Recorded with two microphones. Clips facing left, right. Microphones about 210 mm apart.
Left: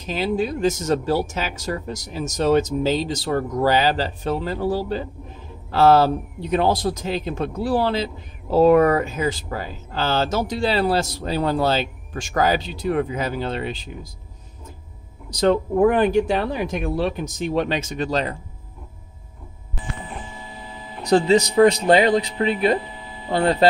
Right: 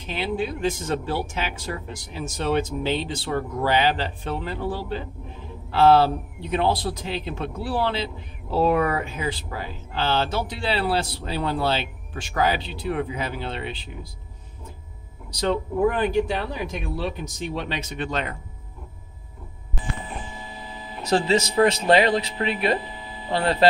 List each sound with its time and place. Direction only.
0.0 s a man's voice: 40° left (ahead or behind)
15.4 s a man's voice: 55° left (ahead or behind); by 18.4 s 35° left (ahead or behind)
21.4 s a man's voice: 20° left (ahead or behind)